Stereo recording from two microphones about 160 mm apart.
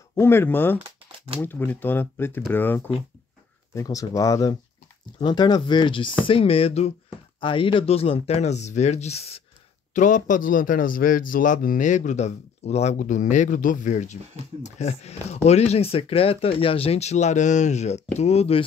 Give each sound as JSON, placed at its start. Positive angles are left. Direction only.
{"t": 0.1, "sound": "speech", "side_deg": 15}
{"t": 9.9, "sound": "a man's voice", "side_deg": 50}